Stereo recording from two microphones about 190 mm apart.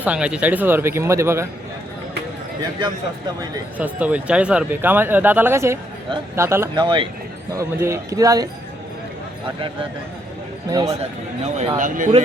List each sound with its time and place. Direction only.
0.0 s speech: 5° right (ahead or behind)
3.8 s speech: 10° right (ahead or behind)
6.7 s speech: 25° right (ahead or behind)
7.5 s speech: 15° right (ahead or behind)
10.7 s speech: 20° right (ahead or behind)
11.4 s speech: 35° right (ahead or behind)